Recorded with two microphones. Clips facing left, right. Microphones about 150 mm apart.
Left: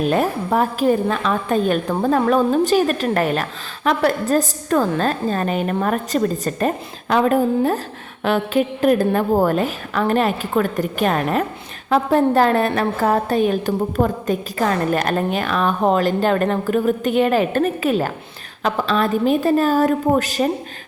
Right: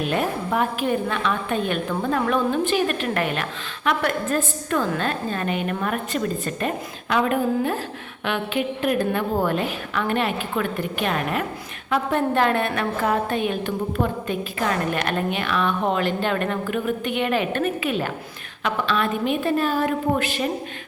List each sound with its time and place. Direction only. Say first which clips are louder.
0.0 s a woman's voice: left 5 dB; 40° left (ahead or behind)